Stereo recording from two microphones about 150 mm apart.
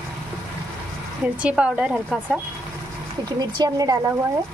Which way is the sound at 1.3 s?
10° right (ahead or behind).